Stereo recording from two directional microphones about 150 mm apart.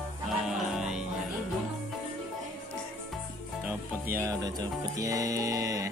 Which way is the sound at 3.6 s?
15° right (ahead or behind).